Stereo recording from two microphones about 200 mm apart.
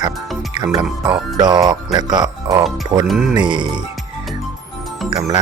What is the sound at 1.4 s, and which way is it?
Speech, 20° right (ahead or behind).